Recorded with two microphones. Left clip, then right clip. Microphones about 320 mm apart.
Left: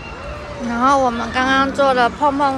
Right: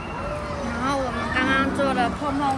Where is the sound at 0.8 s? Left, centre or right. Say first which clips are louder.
Left 11 dB; centre.